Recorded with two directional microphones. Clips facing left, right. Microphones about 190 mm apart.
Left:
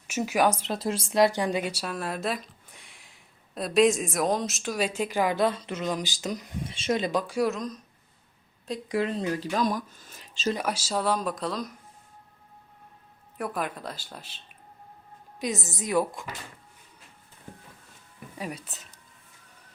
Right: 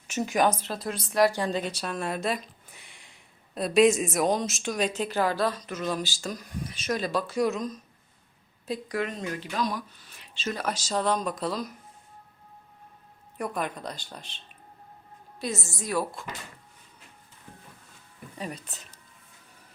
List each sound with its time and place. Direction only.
0.1 s speech: 5° left (ahead or behind)
0.7 s speech: 25° left (ahead or behind)
7.4 s speech: centre (ahead or behind)
8.9 s speech: 30° left (ahead or behind)
10.5 s speech: 10° left (ahead or behind)
13.4 s speech: centre (ahead or behind)
15.4 s speech: 15° left (ahead or behind)
18.3 s speech: 10° left (ahead or behind)